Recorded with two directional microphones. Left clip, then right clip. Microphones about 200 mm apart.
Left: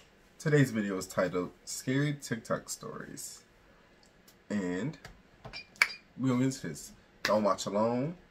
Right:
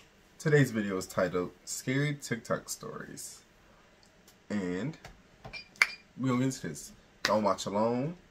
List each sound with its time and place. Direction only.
0.4 s speech: 15° right (ahead or behind)
4.5 s speech: 10° right (ahead or behind)